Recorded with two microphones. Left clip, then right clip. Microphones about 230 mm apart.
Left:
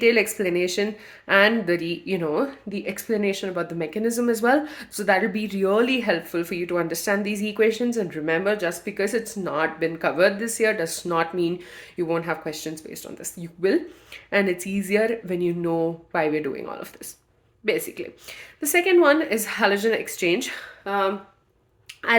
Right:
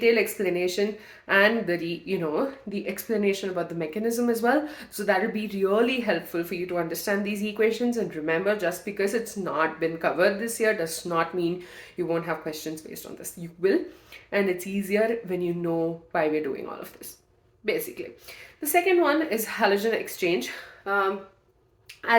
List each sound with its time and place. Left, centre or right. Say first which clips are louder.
0.0 s speech: left 3 dB; left